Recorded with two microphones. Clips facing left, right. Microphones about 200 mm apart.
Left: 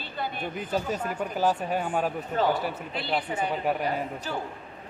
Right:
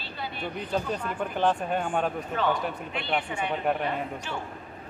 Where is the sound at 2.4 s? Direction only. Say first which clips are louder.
Left 2 dB; 40° left (ahead or behind).